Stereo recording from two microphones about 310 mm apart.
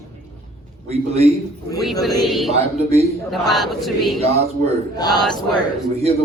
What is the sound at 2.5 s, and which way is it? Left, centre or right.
Speech, centre.